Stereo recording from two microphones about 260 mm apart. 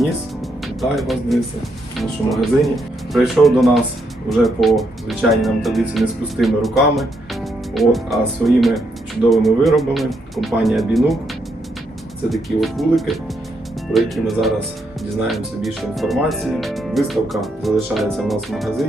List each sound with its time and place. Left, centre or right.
0.8 s speech: centre
12.3 s speech: centre